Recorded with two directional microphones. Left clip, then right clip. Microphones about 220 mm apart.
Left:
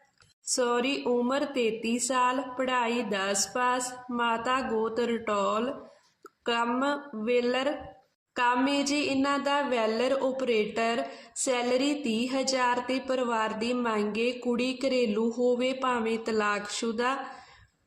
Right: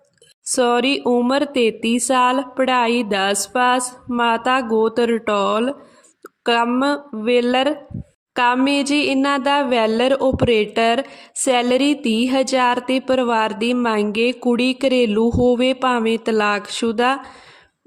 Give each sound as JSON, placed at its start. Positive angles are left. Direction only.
{"t": 0.5, "sound": "a woman's voice", "side_deg": -45}